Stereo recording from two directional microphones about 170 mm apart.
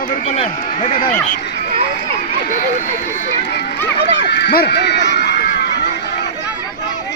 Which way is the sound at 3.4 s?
80° left.